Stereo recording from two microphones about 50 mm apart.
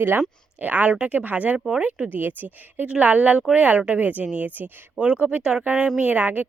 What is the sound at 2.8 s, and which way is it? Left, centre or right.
Speech, right.